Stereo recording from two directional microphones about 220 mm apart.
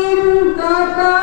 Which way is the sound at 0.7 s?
15° left (ahead or behind).